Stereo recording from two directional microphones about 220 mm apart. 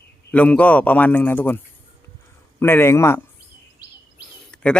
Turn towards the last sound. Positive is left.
turn(degrees=5)  # may be behind; listen again after turning